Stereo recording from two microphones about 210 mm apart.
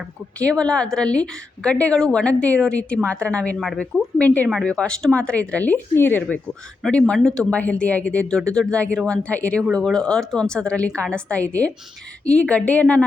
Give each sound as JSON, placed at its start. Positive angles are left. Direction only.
{"t": 0.3, "sound": "speech", "side_deg": 5}